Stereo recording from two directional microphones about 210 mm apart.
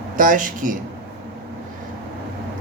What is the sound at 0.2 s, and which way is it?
Speech, 40° right (ahead or behind).